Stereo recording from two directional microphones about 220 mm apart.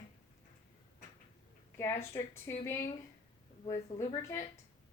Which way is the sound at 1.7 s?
10° left (ahead or behind).